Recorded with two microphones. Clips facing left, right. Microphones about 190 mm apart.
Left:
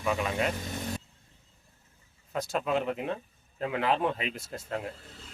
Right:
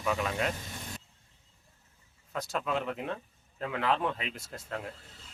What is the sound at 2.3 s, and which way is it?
Speech, 20° left (ahead or behind).